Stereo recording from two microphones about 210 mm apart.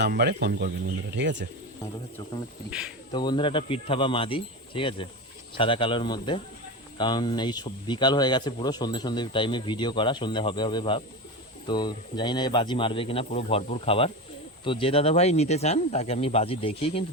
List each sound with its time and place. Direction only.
0.0 s speech: 50° right (ahead or behind)
3.1 s speech: 20° left (ahead or behind)